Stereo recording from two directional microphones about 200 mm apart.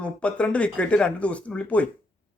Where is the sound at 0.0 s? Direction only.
5° left (ahead or behind).